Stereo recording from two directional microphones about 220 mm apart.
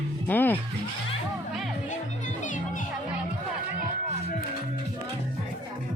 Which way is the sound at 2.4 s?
35° left (ahead or behind).